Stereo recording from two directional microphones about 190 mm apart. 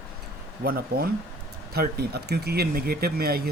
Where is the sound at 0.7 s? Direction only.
55° right (ahead or behind).